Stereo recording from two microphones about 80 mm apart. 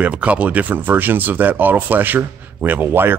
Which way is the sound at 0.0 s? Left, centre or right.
Centre.